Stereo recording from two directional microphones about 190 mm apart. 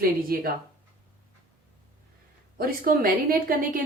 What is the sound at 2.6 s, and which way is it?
A woman's voice, 50° right (ahead or behind).